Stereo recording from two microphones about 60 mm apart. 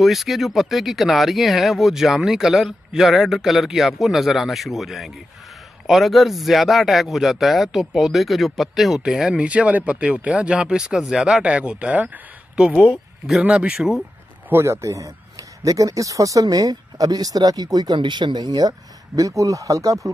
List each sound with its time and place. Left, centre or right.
0.0 s speech: centre
9.4 s speech: right; by 11.4 s centre
11.4 s speech: centre
14.5 s a man's voice: right